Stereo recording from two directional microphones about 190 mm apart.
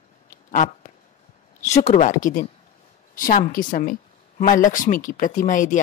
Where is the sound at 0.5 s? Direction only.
45° left (ahead or behind).